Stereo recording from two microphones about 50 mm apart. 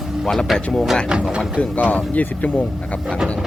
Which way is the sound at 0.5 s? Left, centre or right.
Centre.